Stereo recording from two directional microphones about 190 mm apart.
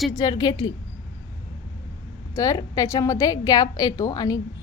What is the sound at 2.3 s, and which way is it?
A woman's voice, 20° left (ahead or behind).